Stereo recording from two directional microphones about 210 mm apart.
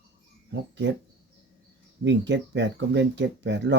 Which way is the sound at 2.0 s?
55° right (ahead or behind).